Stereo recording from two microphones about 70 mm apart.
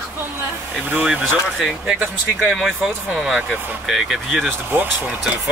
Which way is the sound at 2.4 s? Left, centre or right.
Centre.